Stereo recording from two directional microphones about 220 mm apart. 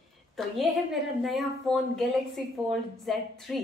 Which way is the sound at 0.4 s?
Centre (ahead or behind).